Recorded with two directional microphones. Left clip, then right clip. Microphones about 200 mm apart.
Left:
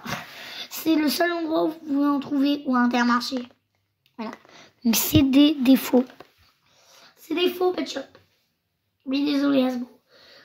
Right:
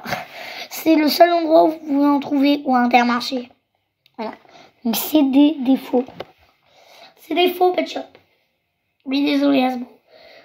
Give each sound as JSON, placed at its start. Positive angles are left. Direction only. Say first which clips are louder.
{"t": 0.0, "sound": "speech", "louder": "right 6 dB", "side_deg": 35}
{"t": 4.0, "sound": "speech", "louder": "right 7 dB", "side_deg": 40}
{"t": 6.7, "sound": "a sound", "louder": "right 8 dB", "side_deg": 35}
{"t": 9.1, "sound": "speech", "louder": "right 5 dB", "side_deg": 25}